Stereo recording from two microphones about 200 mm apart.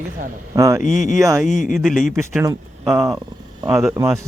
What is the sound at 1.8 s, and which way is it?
Speech, centre (ahead or behind).